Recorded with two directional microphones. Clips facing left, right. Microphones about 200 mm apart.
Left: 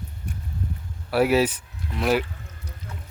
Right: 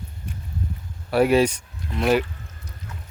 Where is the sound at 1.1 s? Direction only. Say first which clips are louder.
Right 2 dB; 5° left (ahead or behind).